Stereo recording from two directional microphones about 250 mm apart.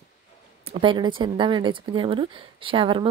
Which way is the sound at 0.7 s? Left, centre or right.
Centre.